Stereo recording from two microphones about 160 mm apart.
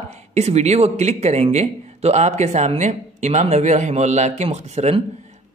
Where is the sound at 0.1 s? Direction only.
45° right (ahead or behind).